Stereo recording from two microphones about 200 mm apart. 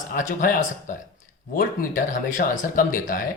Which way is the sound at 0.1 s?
40° left (ahead or behind).